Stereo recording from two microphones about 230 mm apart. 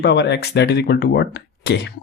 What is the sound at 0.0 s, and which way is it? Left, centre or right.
Speech, left.